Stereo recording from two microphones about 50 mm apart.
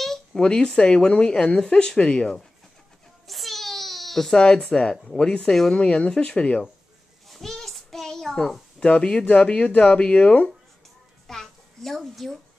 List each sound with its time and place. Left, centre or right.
0.0 s a sound: centre
0.4 s speech: centre
3.3 s baby cry: centre
4.6 s speech: centre
4.9 s speech: centre
5.9 s speech: centre
7.2 s a sound: centre
8.7 s speech: centre
11.2 s a child's voice: centre